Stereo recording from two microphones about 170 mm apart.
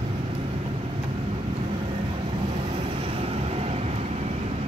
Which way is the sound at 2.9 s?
35° right (ahead or behind).